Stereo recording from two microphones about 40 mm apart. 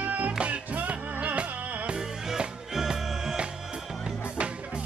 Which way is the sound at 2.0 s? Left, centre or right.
Centre.